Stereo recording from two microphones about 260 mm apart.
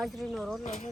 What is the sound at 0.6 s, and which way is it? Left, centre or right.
Speech, left.